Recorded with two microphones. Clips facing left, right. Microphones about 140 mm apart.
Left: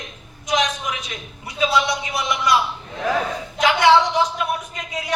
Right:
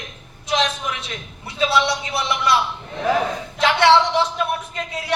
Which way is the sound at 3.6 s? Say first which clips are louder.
Even; 30° right (ahead or behind).